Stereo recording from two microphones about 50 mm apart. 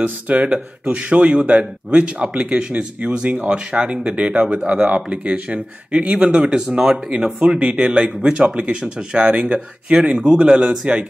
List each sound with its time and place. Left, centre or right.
0.0 s speech: right